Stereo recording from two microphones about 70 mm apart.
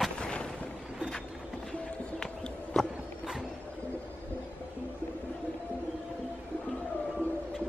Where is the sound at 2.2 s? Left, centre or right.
Centre.